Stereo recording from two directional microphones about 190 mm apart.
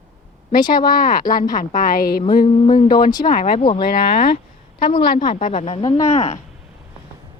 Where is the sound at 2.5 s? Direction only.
35° left (ahead or behind).